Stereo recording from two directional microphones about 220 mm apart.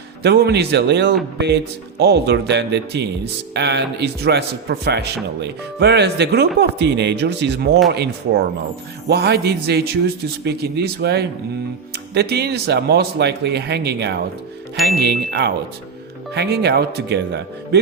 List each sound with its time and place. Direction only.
0.2 s speech: 50° right (ahead or behind)